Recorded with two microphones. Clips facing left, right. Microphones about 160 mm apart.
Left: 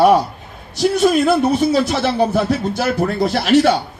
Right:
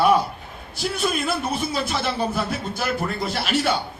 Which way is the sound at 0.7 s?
40° left (ahead or behind).